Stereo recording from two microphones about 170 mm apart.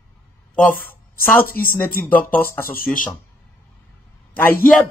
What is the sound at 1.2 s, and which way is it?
Speech, 10° left (ahead or behind).